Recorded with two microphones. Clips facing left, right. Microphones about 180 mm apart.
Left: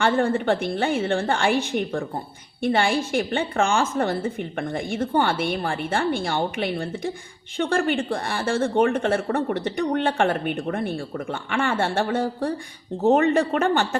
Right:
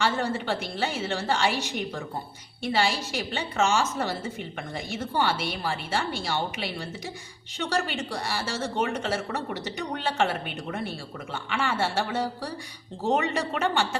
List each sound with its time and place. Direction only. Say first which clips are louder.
0.0 s a woman's voice: left 6 dB; 50° left (ahead or behind)